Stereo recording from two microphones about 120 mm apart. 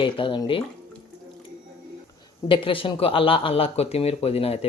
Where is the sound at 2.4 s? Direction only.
45° left (ahead or behind).